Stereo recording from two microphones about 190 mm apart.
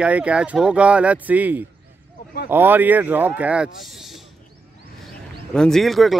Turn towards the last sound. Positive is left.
turn(degrees=0)  # may be behind; listen again after turning